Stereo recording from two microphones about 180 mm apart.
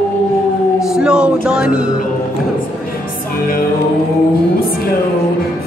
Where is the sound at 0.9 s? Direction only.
5° right (ahead or behind).